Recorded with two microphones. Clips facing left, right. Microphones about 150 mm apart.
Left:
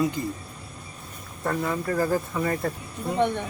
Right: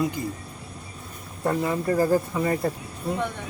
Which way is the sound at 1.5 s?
15° right (ahead or behind).